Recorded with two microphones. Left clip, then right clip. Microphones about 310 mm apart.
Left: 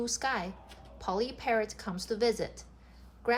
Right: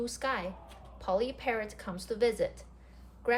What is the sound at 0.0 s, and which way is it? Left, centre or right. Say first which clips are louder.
A woman's voice: left 1 dB; left.